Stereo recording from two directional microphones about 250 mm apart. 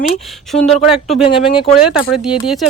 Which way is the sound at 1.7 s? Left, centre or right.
Centre.